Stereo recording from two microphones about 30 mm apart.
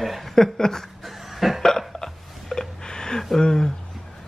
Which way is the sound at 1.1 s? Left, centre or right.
Centre.